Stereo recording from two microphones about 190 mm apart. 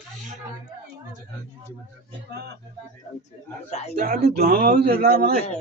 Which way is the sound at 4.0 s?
50° right (ahead or behind).